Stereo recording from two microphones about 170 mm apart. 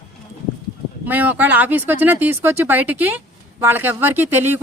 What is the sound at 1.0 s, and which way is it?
Speech, 10° right (ahead or behind).